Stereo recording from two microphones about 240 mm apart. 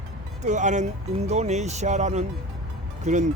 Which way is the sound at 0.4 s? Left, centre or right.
Right.